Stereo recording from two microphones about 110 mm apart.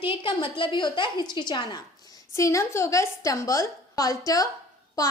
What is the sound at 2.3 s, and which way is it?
A woman's voice, 30° left (ahead or behind).